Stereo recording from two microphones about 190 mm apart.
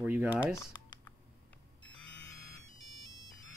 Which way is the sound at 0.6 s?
20° left (ahead or behind).